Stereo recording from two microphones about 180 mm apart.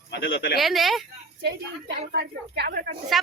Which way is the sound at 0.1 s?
70° left (ahead or behind).